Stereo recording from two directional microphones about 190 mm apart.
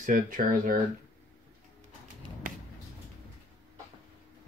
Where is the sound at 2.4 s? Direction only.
45° right (ahead or behind).